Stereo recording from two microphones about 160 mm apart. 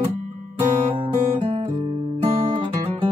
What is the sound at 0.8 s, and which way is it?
Guitar, 30° right (ahead or behind).